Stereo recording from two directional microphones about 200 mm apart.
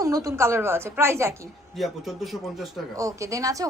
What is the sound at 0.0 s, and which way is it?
A woman's voice, 15° right (ahead or behind).